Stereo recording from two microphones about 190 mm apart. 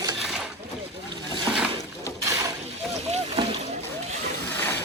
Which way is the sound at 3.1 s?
35° right (ahead or behind).